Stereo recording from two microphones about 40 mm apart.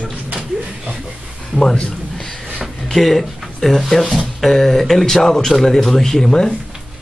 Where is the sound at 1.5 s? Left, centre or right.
Centre.